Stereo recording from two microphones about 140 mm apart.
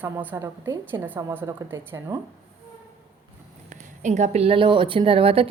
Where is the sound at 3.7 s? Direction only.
55° right (ahead or behind); by 5.5 s 40° right (ahead or behind).